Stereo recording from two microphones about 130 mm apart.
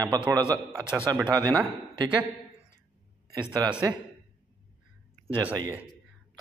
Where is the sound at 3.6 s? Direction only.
30° right (ahead or behind).